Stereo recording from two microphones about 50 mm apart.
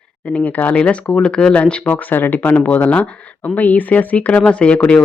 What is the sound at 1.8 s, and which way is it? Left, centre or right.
Speech, left.